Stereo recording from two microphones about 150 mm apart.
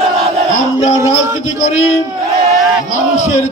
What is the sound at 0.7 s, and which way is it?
Music, 20° right (ahead or behind).